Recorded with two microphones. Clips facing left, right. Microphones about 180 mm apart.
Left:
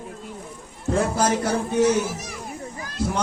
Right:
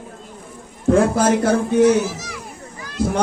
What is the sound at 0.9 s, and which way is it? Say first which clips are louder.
Speech: right 6 dB; 55° right (ahead or behind).